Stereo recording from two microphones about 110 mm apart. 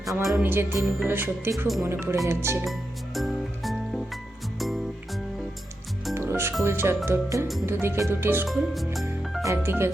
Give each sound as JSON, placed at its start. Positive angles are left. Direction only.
{"t": 0.0, "sound": "music", "side_deg": 0}
{"t": 0.4, "sound": "speech", "side_deg": -20}
{"t": 3.2, "sound": "music", "side_deg": 0}
{"t": 6.1, "sound": "music", "side_deg": -25}
{"t": 6.7, "sound": "speech", "side_deg": -20}
{"t": 8.4, "sound": "speech", "side_deg": 0}
{"t": 9.4, "sound": "speech", "side_deg": -25}